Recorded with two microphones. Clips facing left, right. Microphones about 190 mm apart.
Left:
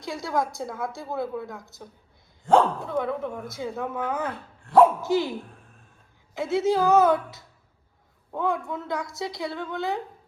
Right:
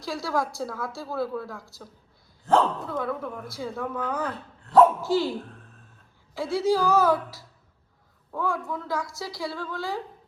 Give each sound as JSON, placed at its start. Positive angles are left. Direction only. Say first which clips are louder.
{"t": 0.0, "sound": "speech", "louder": "left 1 dB", "side_deg": 20}